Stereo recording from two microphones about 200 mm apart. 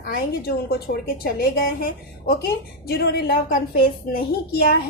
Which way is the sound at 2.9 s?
50° left (ahead or behind).